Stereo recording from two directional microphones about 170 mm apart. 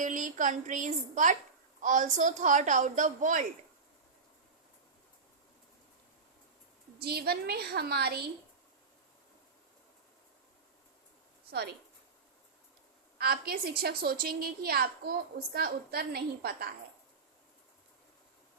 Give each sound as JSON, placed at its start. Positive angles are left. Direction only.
{"t": 0.0, "sound": "a woman's voice", "side_deg": -50}
{"t": 7.0, "sound": "a woman's voice", "side_deg": -70}
{"t": 13.1, "sound": "a woman's voice", "side_deg": -65}